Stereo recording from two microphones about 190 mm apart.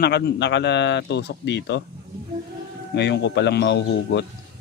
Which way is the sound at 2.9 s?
65° left (ahead or behind).